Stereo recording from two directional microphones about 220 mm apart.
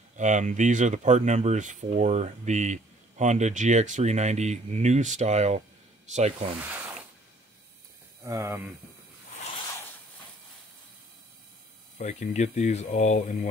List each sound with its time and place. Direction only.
0.2 s speech: 35° right (ahead or behind)
8.2 s speech: 15° right (ahead or behind)
12.0 s speech: 30° left (ahead or behind)